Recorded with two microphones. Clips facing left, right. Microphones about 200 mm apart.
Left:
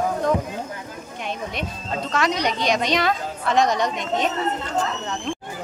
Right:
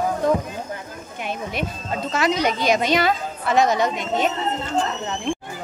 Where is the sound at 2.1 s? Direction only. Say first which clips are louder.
Right 2 dB; 5° right (ahead or behind).